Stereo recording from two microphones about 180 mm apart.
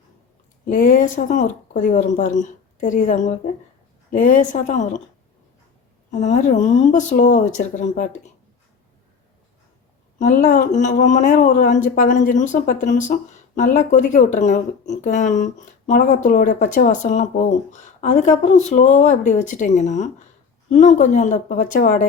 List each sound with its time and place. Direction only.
0.7 s speech: 50° left (ahead or behind)
6.1 s speech: 40° left (ahead or behind)
10.2 s speech: 45° left (ahead or behind)